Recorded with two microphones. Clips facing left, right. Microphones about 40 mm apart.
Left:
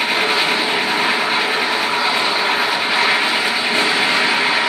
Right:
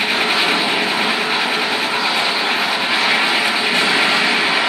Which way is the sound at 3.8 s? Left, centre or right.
Centre.